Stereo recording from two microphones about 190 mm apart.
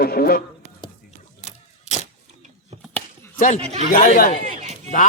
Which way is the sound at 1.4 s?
35° left (ahead or behind).